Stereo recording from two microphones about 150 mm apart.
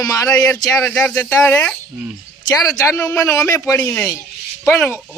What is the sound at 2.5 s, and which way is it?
Speech, 25° left (ahead or behind).